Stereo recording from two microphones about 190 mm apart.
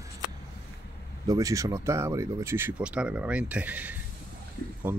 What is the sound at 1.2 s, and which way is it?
Speech, 15° right (ahead or behind).